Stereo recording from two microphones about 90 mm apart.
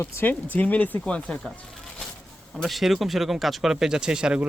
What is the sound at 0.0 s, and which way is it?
Speech, 25° left (ahead or behind).